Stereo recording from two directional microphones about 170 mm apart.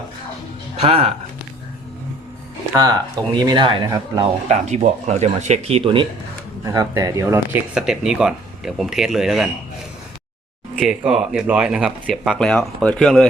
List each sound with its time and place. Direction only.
0.8 s speech: 35° right (ahead or behind)
3.3 s speech: 25° right (ahead or behind)
4.4 s speech: 45° right (ahead or behind)
6.7 s speech: 20° right (ahead or behind); by 9.5 s centre (ahead or behind)
10.8 s speech: 5° right (ahead or behind)